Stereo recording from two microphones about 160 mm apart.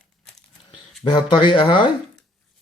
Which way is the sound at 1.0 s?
30° left (ahead or behind).